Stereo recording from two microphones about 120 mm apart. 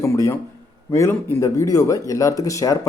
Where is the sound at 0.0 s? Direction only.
25° left (ahead or behind).